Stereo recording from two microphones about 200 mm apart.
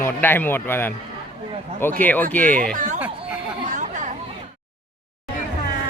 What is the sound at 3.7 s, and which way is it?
Chatter, 40° right (ahead or behind).